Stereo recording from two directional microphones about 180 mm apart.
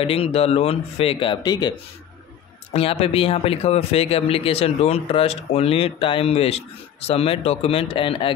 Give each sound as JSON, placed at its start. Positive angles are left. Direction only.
{"t": 0.0, "sound": "speech", "side_deg": 30}
{"t": 2.7, "sound": "speech", "side_deg": 35}